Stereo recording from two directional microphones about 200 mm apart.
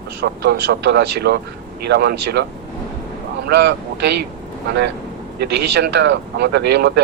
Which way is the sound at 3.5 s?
60° right (ahead or behind).